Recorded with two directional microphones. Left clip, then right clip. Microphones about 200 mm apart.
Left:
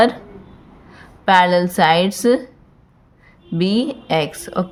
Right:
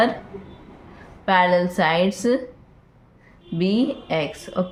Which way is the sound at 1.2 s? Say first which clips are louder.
Left 4 dB; 45° left (ahead or behind).